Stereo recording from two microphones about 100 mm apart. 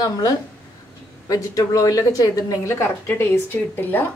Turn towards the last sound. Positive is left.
turn(degrees=20)  # may be behind; listen again after turning